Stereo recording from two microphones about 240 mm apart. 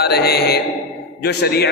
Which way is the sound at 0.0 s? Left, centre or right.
Left.